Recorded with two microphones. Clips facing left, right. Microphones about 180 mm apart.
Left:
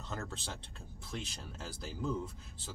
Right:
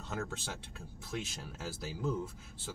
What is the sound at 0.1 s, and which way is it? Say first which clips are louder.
Speech: right 3 dB; 10° right (ahead or behind).